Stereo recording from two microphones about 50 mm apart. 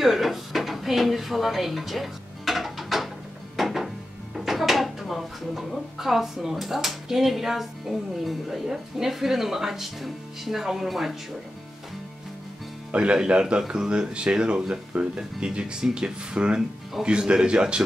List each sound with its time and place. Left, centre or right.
0.0 s drawer open or close: centre
3.5 s music: centre
4.5 s a sound: centre
5.9 s speech: centre
12.9 s speech: centre